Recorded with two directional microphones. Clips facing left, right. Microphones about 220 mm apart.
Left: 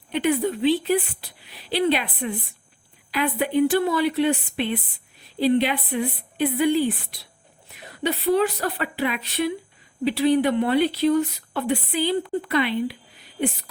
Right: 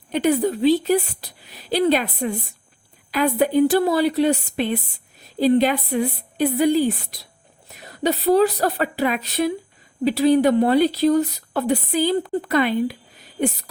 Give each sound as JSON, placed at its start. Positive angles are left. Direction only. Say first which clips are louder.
{"t": 0.1, "sound": "speech", "louder": "right 3 dB", "side_deg": -40}